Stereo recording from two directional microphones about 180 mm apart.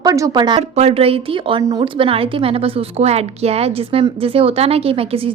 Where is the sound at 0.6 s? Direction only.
35° right (ahead or behind).